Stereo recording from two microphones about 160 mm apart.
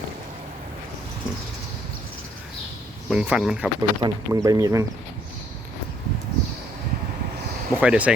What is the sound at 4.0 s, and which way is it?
Speech, 20° right (ahead or behind).